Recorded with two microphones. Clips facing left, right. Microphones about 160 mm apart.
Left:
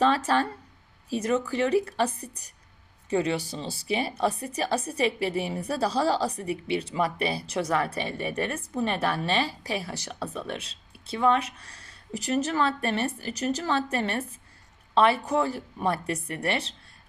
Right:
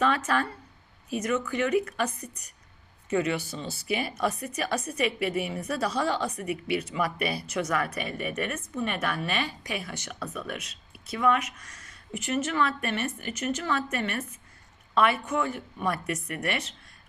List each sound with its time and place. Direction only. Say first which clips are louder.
0.0 s speech: left 3 dB; 30° left (ahead or behind)